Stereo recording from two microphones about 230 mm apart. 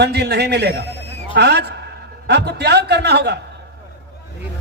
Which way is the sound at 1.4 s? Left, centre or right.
Right.